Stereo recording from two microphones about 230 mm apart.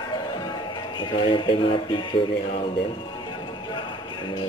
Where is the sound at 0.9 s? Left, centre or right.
Left.